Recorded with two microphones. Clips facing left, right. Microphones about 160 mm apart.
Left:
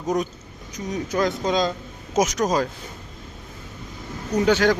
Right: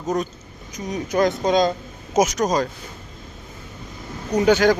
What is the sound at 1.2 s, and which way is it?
Speech, 50° right (ahead or behind).